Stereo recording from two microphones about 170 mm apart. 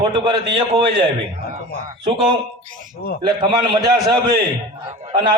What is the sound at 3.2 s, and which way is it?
Speech, 30° right (ahead or behind).